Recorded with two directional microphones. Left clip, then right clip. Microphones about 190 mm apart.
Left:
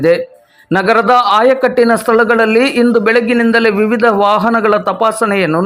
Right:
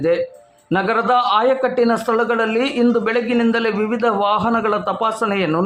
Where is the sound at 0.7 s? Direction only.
25° left (ahead or behind).